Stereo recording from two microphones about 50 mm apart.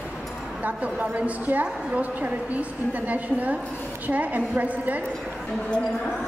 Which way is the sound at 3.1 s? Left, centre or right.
Right.